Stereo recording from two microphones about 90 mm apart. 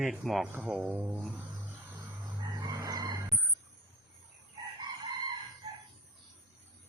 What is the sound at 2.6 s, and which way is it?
Chicken, 40° right (ahead or behind).